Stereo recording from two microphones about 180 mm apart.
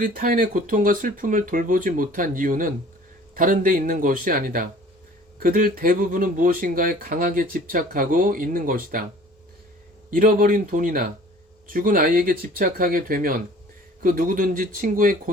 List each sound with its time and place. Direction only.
0.0 s speech: 50° right (ahead or behind)
10.1 s speech: 50° right (ahead or behind)